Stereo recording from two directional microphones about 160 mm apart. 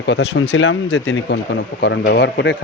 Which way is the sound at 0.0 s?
90° left.